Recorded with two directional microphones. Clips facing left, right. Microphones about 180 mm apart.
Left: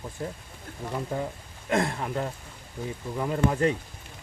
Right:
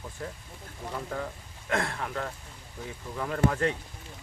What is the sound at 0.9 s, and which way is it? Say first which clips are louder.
Speech: left 4 dB; 20° left (ahead or behind).